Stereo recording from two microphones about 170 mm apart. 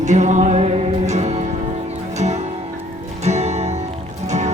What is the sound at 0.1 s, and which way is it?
Music, 45° right (ahead or behind).